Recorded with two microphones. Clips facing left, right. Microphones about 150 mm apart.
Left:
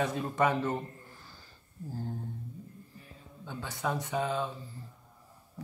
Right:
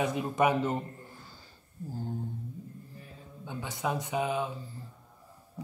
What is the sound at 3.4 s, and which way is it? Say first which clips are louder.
Speech: right 1 dB; 15° right (ahead or behind).